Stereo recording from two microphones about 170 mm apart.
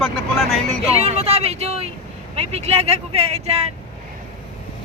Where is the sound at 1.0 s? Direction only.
35° right (ahead or behind).